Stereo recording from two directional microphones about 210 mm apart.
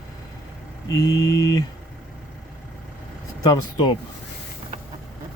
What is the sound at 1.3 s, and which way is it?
Speech, 15° left (ahead or behind).